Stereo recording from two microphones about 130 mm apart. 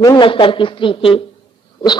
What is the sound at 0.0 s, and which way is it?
Speech, 30° left (ahead or behind).